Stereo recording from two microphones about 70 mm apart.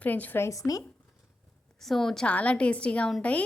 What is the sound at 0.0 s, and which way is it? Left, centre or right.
Speech, left.